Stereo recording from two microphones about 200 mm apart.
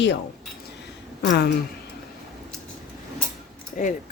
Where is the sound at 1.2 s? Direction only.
65° left (ahead or behind).